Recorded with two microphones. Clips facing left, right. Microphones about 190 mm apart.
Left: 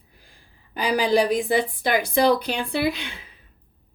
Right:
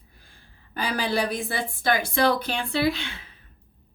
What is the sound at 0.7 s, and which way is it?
A woman's voice, 15° left (ahead or behind).